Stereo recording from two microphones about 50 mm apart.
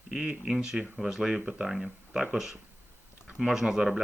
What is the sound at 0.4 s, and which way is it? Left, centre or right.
Speech, centre.